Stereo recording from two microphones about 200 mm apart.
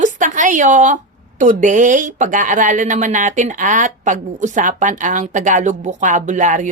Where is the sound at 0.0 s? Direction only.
40° right (ahead or behind).